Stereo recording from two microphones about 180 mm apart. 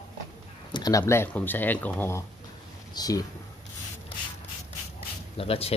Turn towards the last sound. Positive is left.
turn(degrees=30)  # may be behind; listen again after turning